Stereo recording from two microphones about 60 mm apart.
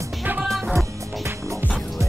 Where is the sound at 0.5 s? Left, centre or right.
Centre.